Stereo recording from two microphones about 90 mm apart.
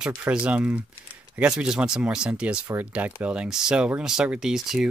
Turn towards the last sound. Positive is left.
turn(degrees=-5)  # may be behind; listen again after turning